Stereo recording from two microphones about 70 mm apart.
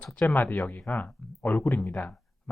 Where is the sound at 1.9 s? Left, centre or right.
Left.